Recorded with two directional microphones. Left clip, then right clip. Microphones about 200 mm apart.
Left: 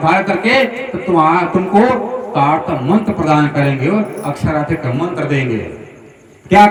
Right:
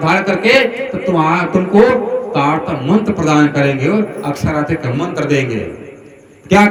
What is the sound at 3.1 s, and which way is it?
Speech, 25° right (ahead or behind).